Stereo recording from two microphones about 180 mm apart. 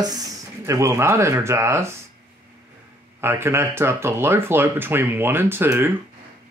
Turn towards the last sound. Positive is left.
turn(degrees=-10)  # may be behind; listen again after turning